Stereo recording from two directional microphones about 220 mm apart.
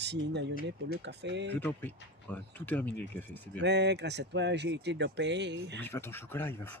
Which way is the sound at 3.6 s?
50° right (ahead or behind).